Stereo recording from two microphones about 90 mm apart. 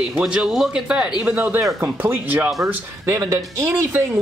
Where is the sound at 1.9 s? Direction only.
20° right (ahead or behind).